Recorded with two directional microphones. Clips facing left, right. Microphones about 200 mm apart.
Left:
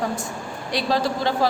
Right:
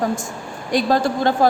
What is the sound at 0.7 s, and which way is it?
Speech, 50° right (ahead or behind).